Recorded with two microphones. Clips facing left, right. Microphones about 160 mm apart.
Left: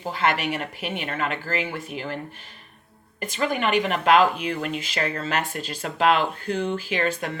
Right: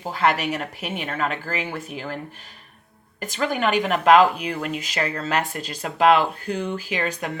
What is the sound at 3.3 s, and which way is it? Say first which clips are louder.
Speech: right 1 dB; 40° right (ahead or behind).